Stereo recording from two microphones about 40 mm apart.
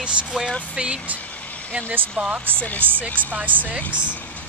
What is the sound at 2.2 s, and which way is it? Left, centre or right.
Speech, right.